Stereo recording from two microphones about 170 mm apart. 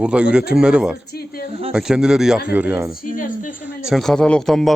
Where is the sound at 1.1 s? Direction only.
65° left (ahead or behind).